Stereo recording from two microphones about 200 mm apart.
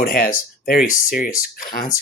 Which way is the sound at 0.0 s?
50° left (ahead or behind).